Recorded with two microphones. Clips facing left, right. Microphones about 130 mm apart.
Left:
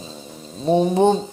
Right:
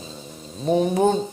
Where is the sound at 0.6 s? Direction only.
30° left (ahead or behind).